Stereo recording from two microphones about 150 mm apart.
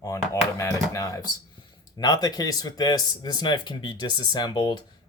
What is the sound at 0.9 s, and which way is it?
Speech, 20° left (ahead or behind).